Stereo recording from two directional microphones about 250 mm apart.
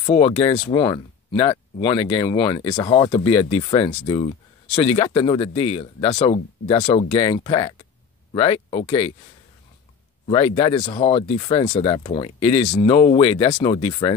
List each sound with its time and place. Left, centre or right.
0.0 s speech: left
10.2 s speech: left